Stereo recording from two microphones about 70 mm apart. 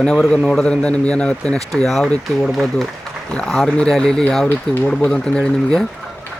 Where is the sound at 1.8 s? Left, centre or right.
Centre.